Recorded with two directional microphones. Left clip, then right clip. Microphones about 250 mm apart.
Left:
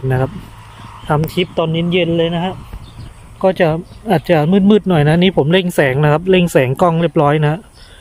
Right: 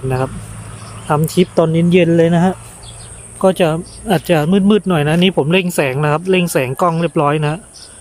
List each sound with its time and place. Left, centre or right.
1.0 s speech: centre